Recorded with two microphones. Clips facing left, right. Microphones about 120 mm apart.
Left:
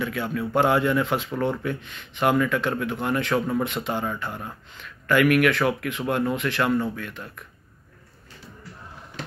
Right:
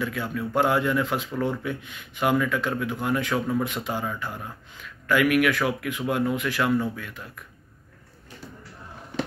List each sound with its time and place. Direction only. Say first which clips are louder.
0.0 s speech: left 2 dB; centre (ahead or behind)